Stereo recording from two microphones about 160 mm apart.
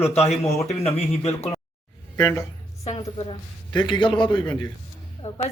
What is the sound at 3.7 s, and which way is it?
Speech, 30° left (ahead or behind).